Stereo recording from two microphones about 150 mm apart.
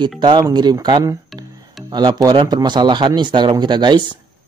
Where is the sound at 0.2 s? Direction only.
25° right (ahead or behind).